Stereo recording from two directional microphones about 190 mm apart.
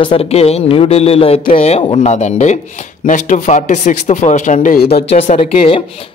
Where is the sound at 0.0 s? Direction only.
30° left (ahead or behind); by 5.0 s 55° left (ahead or behind).